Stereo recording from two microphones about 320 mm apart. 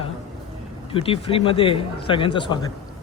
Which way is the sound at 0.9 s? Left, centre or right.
Centre.